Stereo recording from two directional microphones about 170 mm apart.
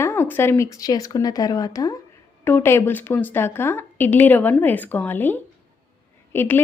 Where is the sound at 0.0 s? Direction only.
15° left (ahead or behind).